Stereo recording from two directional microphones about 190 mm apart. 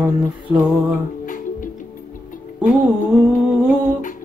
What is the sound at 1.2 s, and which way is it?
Music, 45° left (ahead or behind).